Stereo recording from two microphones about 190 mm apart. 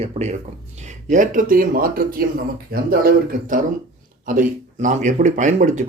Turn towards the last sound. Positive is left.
turn(degrees=-40)  # may be behind; listen again after turning